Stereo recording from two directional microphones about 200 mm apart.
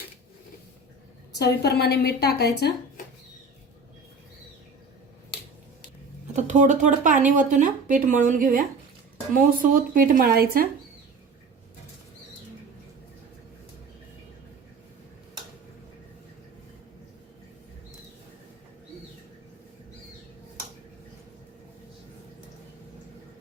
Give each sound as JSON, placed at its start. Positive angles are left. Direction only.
{"t": 1.3, "sound": "a woman's voice", "side_deg": 55}
{"t": 6.3, "sound": "speech", "side_deg": -35}